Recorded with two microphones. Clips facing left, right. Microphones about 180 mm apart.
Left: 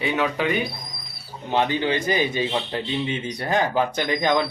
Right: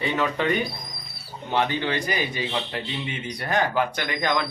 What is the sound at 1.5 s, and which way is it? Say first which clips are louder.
Speech: left 3 dB; 20° left (ahead or behind).